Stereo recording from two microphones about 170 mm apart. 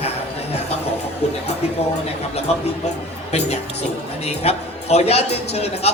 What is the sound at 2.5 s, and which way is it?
A man's voice, 40° left (ahead or behind).